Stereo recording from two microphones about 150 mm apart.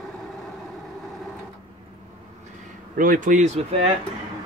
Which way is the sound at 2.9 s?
65° right (ahead or behind).